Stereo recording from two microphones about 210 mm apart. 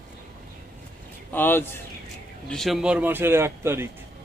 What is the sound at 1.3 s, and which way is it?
A man's voice, 10° left (ahead or behind).